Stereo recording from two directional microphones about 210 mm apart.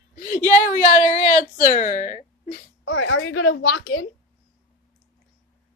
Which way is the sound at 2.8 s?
70° left (ahead or behind).